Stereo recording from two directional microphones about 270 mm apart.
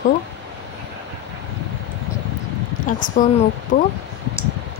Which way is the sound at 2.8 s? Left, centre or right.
Left.